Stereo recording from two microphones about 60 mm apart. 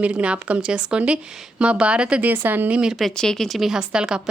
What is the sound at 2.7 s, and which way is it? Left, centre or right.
Speech, centre.